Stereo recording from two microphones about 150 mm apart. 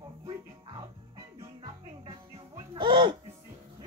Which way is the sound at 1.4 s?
40° right (ahead or behind).